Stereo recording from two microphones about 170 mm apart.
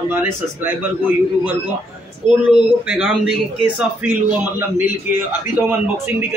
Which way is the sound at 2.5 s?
5° right (ahead or behind).